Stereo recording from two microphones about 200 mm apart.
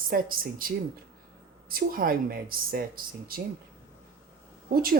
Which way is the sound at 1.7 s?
45° right (ahead or behind).